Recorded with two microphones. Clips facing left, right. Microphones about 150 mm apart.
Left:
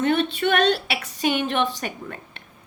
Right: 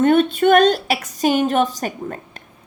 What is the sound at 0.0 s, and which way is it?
A woman's voice, 45° right (ahead or behind).